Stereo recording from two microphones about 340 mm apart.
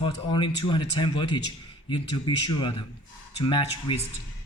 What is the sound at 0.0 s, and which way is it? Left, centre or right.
A man's voice, centre.